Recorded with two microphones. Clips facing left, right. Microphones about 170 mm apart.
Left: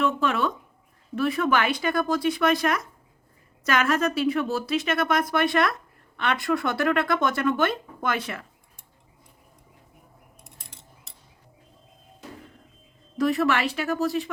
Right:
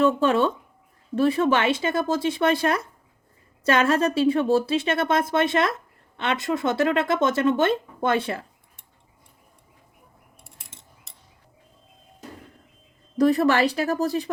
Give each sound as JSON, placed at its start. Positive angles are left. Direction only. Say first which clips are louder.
{"t": 0.0, "sound": "speech", "louder": "right 5 dB", "side_deg": -30}
{"t": 11.1, "sound": "tick", "louder": "even", "side_deg": 0}
{"t": 13.1, "sound": "speech", "louder": "right 4 dB", "side_deg": -35}